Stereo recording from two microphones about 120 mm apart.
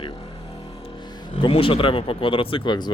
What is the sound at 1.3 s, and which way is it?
Speech, 45° left (ahead or behind).